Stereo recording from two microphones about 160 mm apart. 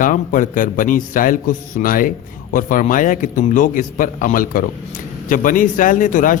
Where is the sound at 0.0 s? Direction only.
55° left (ahead or behind).